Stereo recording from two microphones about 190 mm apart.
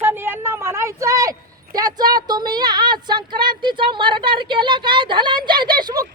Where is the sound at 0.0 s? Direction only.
10° right (ahead or behind).